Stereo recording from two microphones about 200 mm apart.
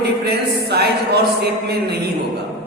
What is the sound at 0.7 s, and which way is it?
Speech, 55° right (ahead or behind).